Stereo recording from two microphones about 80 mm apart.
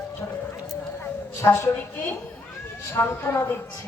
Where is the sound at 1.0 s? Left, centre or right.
Left.